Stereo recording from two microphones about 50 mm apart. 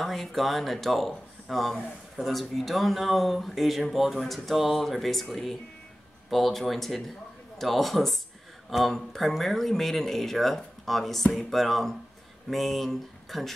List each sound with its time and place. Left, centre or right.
0.0 s speech: centre